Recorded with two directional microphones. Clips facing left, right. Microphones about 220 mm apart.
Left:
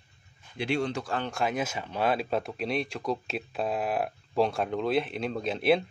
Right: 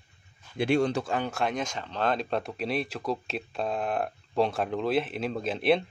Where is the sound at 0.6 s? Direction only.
50° right (ahead or behind).